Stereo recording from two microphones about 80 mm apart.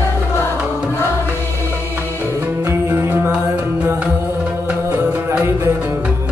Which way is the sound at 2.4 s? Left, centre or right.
Right.